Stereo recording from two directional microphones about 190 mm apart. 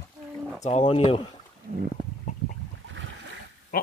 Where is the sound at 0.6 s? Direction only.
35° left (ahead or behind).